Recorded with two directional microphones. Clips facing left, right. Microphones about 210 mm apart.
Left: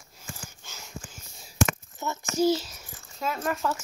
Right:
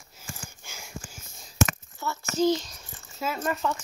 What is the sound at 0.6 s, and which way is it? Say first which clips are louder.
Wheeze: right 1 dB; 10° right (ahead or behind).